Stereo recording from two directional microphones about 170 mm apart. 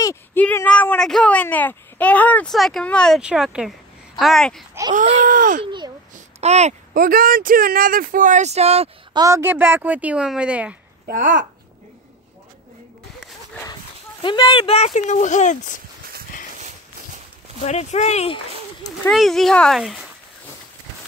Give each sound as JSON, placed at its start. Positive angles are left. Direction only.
{"t": 0.0, "sound": "speech", "side_deg": 15}
{"t": 4.9, "sound": "a sound", "side_deg": -50}
{"t": 5.6, "sound": "a child's voice", "side_deg": -30}
{"t": 6.4, "sound": "speech", "side_deg": -40}
{"t": 6.9, "sound": "speech", "side_deg": -55}
{"t": 9.1, "sound": "speech", "side_deg": -20}
{"t": 11.1, "sound": "a sound", "side_deg": -50}
{"t": 14.2, "sound": "speech", "side_deg": 30}
{"t": 15.0, "sound": "speech", "side_deg": 45}
{"t": 16.5, "sound": "a sound", "side_deg": -45}
{"t": 17.6, "sound": "speech", "side_deg": 40}
{"t": 19.0, "sound": "speech", "side_deg": 0}